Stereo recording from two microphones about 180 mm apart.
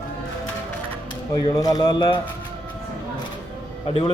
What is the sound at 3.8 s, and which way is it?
Speech, 30° left (ahead or behind).